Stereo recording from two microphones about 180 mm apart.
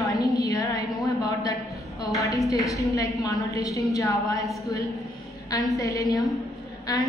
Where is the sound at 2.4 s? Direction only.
20° left (ahead or behind).